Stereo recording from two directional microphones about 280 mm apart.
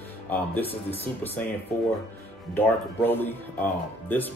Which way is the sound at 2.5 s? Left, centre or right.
Centre.